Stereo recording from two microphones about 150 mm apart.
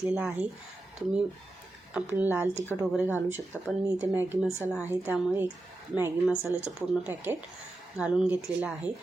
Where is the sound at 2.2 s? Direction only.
10° right (ahead or behind).